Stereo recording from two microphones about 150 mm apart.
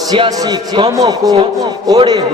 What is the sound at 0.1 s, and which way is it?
A man's voice, 25° right (ahead or behind).